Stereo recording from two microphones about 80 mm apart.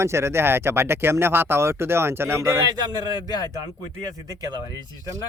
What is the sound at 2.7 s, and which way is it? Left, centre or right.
Speech, right.